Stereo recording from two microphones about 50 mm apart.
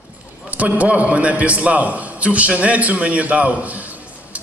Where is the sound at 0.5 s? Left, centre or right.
Right.